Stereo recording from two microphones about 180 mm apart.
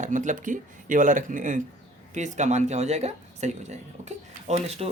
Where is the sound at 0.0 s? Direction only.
45° right (ahead or behind).